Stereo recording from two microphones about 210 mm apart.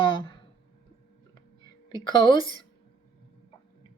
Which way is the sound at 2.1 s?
20° left (ahead or behind).